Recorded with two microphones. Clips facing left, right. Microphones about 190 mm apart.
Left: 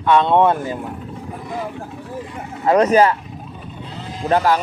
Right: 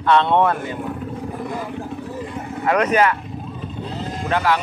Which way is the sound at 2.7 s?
30° left (ahead or behind).